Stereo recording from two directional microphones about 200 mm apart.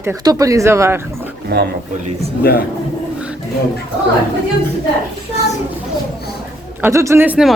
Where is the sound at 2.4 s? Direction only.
50° left (ahead or behind).